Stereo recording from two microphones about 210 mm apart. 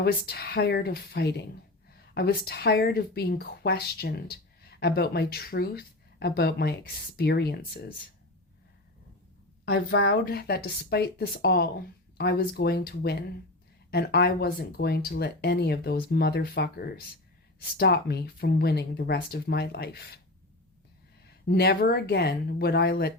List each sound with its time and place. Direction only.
0.0 s speech: 50° left (ahead or behind)
9.6 s speech: 55° left (ahead or behind)
21.4 s speech: 50° left (ahead or behind)